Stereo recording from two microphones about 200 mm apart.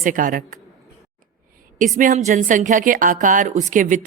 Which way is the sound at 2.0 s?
40° right (ahead or behind).